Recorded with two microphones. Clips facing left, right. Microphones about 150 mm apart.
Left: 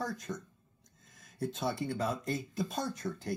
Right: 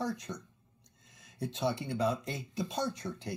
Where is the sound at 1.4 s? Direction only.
Centre (ahead or behind).